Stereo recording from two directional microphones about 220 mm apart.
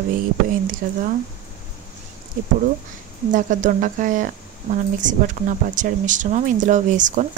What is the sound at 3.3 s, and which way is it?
Speech, 35° right (ahead or behind).